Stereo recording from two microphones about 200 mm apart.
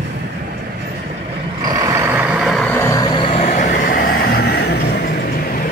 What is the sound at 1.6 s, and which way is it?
Vehicle, 15° right (ahead or behind).